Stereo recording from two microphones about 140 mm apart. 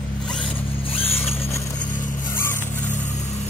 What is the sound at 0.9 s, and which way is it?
Vehicle, 45° left (ahead or behind).